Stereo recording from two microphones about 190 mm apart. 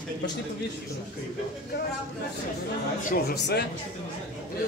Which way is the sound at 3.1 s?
55° left (ahead or behind).